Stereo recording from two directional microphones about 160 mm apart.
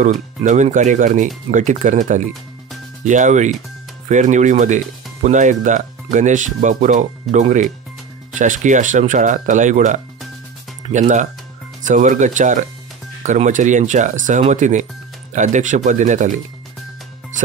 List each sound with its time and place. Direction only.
0.0 s speech: 50° right (ahead or behind)